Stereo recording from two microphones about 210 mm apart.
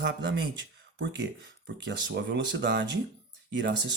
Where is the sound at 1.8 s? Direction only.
55° right (ahead or behind).